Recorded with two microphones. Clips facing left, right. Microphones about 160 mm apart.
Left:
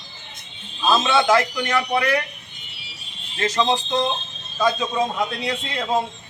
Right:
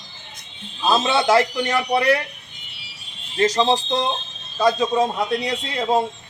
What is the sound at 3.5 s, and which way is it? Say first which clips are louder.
Speech: right 1 dB; 35° right (ahead or behind).